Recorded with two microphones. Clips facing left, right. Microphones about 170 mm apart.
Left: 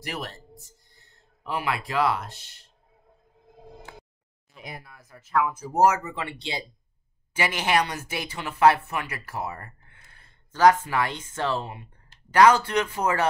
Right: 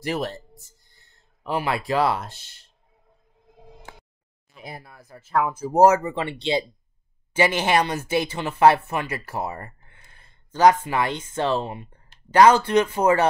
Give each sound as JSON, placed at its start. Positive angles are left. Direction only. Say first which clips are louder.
{"t": 0.0, "sound": "speech", "louder": "right 8 dB", "side_deg": -30}
{"t": 1.4, "sound": "speech", "louder": "right 4 dB", "side_deg": -30}
{"t": 4.6, "sound": "speech", "louder": "right 2 dB", "side_deg": -30}